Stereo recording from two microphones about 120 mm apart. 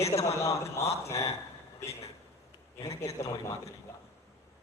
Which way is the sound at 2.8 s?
25° left (ahead or behind).